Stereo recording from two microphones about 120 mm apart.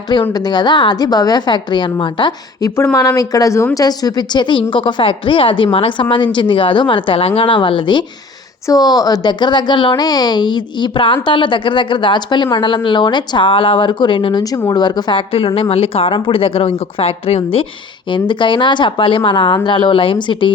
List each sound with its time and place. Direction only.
0.1 s a woman's voice: 35° left (ahead or behind)
8.6 s a woman's voice: 35° left (ahead or behind)
14.4 s a woman's voice: 30° left (ahead or behind); by 17.7 s 55° left (ahead or behind)
18.1 s a woman's voice: 40° left (ahead or behind)